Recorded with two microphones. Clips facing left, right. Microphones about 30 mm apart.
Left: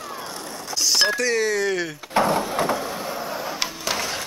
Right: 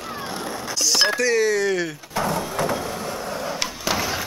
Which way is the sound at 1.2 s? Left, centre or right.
Centre.